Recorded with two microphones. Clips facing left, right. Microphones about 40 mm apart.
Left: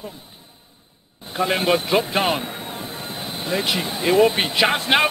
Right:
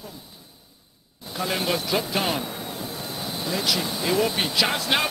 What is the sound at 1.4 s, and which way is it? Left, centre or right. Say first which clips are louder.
Speech: left 6 dB; left.